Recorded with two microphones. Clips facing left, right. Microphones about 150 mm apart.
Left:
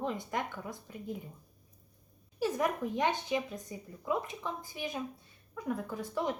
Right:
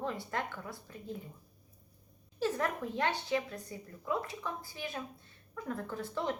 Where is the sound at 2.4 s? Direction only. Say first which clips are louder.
Left 2 dB; 15° left (ahead or behind).